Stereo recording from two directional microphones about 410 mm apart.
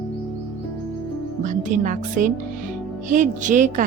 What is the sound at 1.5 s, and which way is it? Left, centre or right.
A woman's voice, centre.